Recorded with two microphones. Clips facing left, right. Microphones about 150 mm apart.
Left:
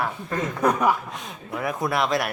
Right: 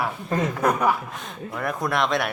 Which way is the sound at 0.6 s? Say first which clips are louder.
Left 2 dB; 10° left (ahead or behind).